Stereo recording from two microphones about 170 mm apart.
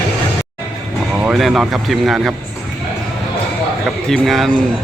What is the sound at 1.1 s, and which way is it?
Speech, 5° right (ahead or behind).